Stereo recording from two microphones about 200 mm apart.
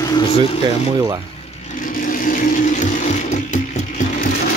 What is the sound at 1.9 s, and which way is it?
Vehicle, 45° left (ahead or behind).